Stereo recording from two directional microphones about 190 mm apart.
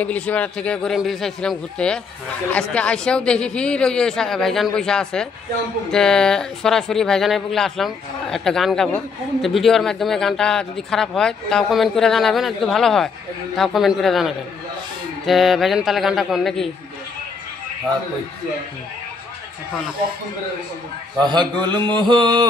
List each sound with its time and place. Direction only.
0.0 s speech: 10° left (ahead or behind)
21.3 s mantra: 25° right (ahead or behind)